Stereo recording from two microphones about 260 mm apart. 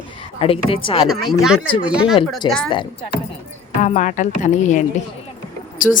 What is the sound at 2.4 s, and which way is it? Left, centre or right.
Speech, centre.